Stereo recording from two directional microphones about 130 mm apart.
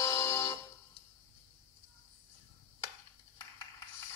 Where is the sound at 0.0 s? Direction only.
30° left (ahead or behind).